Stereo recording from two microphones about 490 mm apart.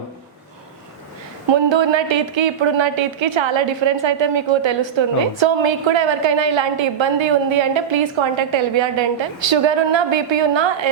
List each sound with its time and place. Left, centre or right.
1.5 s a woman's voice: right